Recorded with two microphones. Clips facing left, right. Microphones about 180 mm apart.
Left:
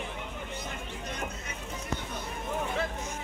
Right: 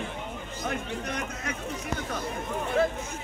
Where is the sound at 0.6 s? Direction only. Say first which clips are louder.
Right 7 dB; 80° right.